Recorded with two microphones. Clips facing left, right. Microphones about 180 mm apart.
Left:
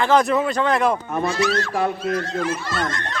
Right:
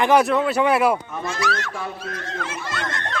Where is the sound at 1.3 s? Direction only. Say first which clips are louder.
Left 3 dB; 30° left (ahead or behind).